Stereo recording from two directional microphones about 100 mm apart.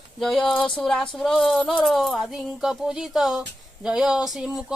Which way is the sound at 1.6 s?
10° left (ahead or behind).